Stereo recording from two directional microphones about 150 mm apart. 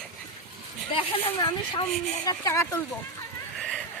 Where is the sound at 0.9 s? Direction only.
30° left (ahead or behind).